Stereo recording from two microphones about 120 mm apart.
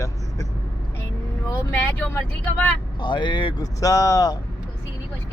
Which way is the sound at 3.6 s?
30° left (ahead or behind).